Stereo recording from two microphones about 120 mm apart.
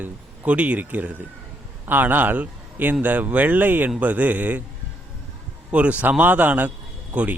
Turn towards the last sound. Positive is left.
turn(degrees=-10)  # may be behind; listen again after turning